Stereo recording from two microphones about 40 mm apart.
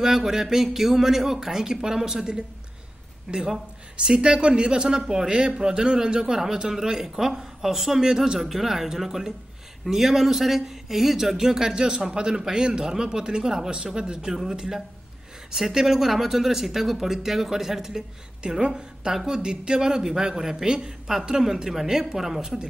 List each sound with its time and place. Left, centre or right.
0.0 s speech: centre
18.4 s a woman's voice: right